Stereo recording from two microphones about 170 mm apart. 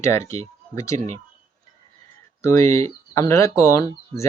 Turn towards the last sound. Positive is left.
turn(degrees=15)  # may be behind; listen again after turning